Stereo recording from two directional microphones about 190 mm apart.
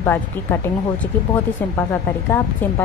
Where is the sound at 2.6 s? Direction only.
10° left (ahead or behind).